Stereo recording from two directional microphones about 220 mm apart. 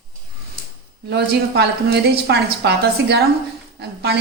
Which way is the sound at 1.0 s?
50° right (ahead or behind).